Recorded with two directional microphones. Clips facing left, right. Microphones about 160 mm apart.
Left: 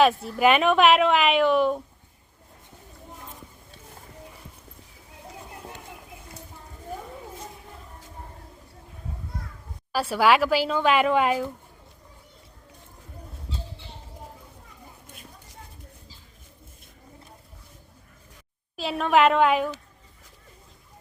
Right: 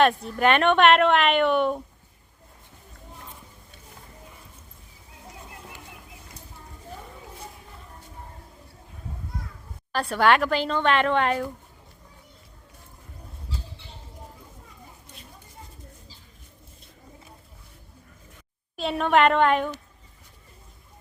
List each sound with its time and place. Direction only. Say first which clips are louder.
0.0 s a woman's voice: left 1 dB; centre (ahead or behind)
9.9 s a woman's voice: even; 5° left (ahead or behind)
18.8 s a woman's voice: even; centre (ahead or behind)